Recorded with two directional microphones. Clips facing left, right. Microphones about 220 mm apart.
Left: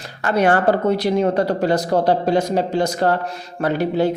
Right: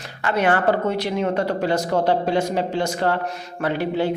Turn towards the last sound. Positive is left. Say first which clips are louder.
# left 3 dB
turn(degrees=40)  # may be behind; listen again after turning